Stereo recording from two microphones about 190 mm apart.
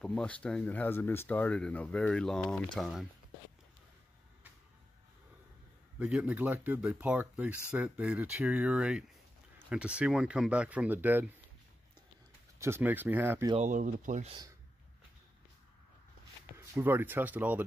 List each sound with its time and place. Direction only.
0.0 s speech: 5° left (ahead or behind)
5.9 s speech: 5° right (ahead or behind)
12.5 s speech: 15° right (ahead or behind)
13.6 s speech: 40° right (ahead or behind)
16.5 s speech: 10° right (ahead or behind)